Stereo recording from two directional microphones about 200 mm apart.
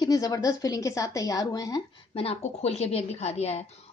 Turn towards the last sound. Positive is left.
turn(degrees=30)  # may be behind; listen again after turning